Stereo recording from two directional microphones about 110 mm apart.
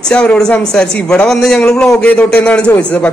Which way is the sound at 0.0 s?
10° left (ahead or behind).